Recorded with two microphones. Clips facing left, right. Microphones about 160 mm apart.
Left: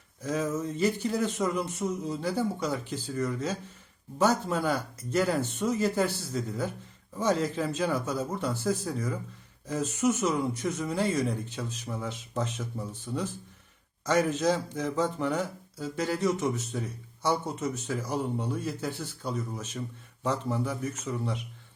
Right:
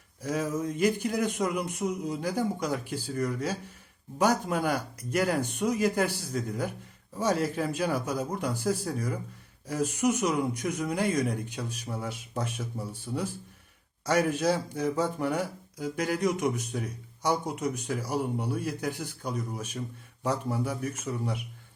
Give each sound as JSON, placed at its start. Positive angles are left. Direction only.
{"t": 0.3, "sound": "speech", "side_deg": -10}